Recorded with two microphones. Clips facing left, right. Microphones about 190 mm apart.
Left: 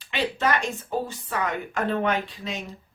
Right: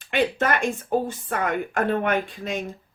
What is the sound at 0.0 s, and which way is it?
Speech, 50° right (ahead or behind).